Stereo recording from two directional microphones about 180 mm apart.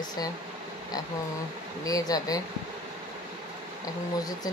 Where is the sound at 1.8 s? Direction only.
20° left (ahead or behind).